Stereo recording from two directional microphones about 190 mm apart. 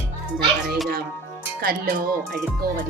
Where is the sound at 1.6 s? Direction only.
50° right (ahead or behind).